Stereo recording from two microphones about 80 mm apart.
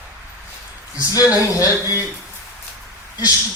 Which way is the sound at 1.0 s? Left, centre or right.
Left.